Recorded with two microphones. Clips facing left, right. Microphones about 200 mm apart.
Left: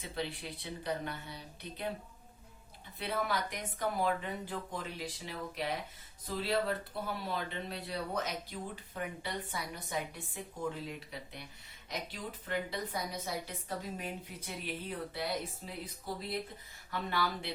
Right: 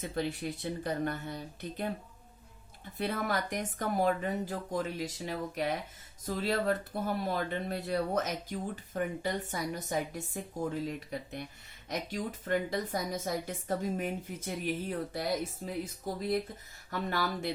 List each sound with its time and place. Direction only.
0.0 s speech: 45° right (ahead or behind)
3.0 s speech: 45° right (ahead or behind)